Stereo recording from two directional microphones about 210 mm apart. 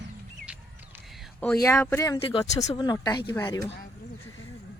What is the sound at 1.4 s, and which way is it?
Speech, 5° left (ahead or behind).